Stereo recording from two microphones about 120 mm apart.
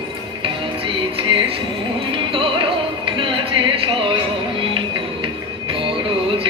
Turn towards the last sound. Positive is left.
turn(degrees=-45)  # may be behind; listen again after turning